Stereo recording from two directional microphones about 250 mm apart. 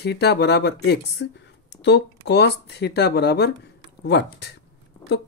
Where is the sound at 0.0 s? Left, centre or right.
Left.